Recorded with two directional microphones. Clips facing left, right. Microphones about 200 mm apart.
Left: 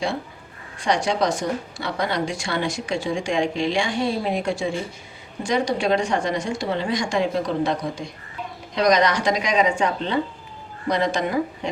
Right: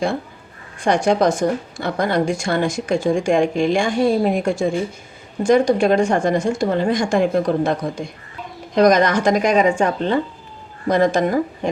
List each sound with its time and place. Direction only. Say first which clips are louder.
0.8 s a woman's voice: right 5 dB; 50° right (ahead or behind)